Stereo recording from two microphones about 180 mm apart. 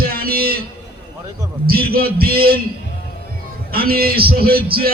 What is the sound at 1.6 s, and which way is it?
Speech, 60° right (ahead or behind).